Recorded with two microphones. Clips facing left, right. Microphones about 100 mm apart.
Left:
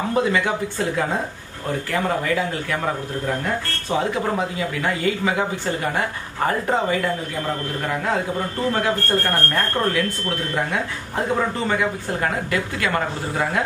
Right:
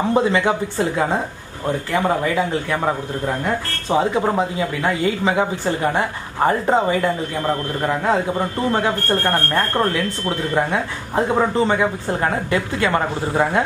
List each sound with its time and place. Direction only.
0.1 s speech: 25° right (ahead or behind)
1.9 s speech: 20° right (ahead or behind)
3.9 s speech: 25° right (ahead or behind)